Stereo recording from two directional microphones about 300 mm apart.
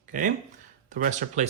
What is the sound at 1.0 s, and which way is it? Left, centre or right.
Speech, right.